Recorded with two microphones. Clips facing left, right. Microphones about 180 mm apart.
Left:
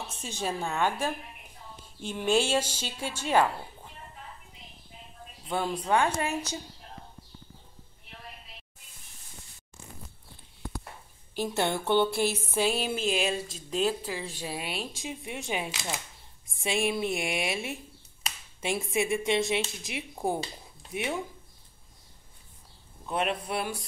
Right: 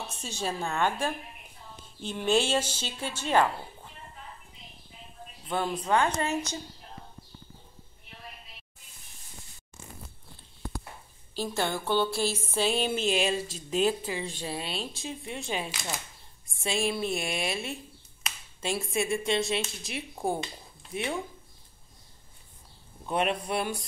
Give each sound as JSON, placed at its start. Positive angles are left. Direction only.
{"t": 0.4, "sound": "a woman's voice", "side_deg": 10}
{"t": 5.5, "sound": "a woman's voice", "side_deg": 10}
{"t": 11.3, "sound": "a sound", "side_deg": 20}
{"t": 12.4, "sound": "a woman's voice", "side_deg": 10}
{"t": 23.0, "sound": "a man's voice", "side_deg": 0}